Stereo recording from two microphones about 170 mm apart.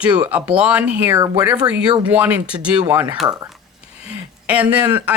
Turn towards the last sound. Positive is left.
turn(degrees=-10)  # may be behind; listen again after turning